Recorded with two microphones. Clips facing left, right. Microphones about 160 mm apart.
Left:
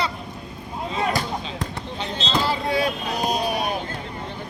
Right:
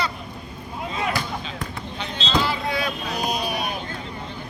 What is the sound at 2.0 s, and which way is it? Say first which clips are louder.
Vehicle: even; 35° left (ahead or behind).